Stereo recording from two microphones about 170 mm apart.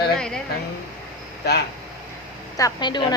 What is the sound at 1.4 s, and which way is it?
Speech, 75° left (ahead or behind).